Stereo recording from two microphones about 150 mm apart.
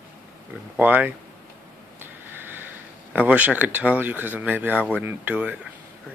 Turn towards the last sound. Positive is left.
turn(degrees=-10)  # may be behind; listen again after turning